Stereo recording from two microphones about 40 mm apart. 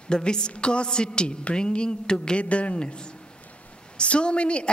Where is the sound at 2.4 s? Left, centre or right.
Left.